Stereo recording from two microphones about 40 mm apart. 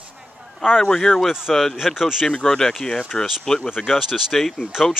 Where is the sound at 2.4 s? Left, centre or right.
Centre.